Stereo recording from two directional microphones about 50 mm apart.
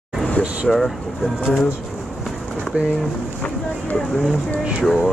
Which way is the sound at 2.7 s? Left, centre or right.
Right.